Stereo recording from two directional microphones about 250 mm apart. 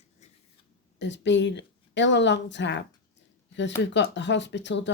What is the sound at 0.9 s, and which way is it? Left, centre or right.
A woman's voice, left.